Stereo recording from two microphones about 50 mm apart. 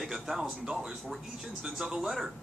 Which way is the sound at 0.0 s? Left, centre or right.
Centre.